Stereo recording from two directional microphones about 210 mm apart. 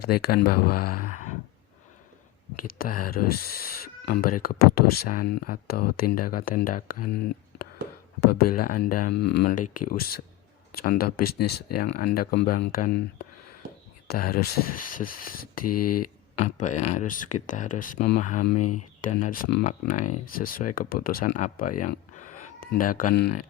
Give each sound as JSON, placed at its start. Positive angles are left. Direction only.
{"t": 0.1, "sound": "speech", "side_deg": 45}
{"t": 2.6, "sound": "speech", "side_deg": 45}
{"t": 8.3, "sound": "speech", "side_deg": 45}
{"t": 14.1, "sound": "speech", "side_deg": 45}
{"t": 19.6, "sound": "speech", "side_deg": 35}
{"t": 21.8, "sound": "a sound", "side_deg": 35}